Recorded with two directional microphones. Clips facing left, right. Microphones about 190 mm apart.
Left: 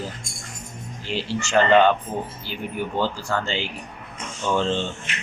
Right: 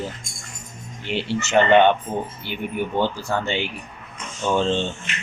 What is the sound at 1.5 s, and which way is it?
Speech, 20° right (ahead or behind).